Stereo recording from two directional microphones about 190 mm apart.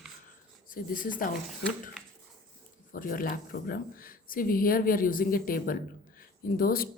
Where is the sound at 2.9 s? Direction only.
45° left (ahead or behind).